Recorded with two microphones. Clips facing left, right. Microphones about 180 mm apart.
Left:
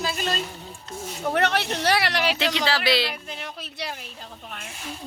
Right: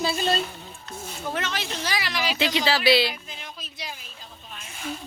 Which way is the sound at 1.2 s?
65° left (ahead or behind).